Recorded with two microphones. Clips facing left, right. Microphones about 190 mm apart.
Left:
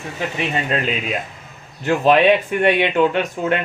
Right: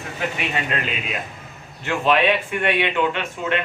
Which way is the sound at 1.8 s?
40° left (ahead or behind).